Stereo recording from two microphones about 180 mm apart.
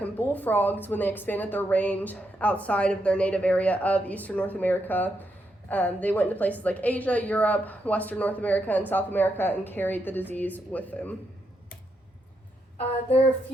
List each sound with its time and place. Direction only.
0.0 s a woman's voice: 10° left (ahead or behind)